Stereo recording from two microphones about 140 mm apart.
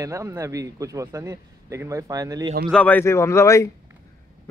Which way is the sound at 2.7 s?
10° left (ahead or behind).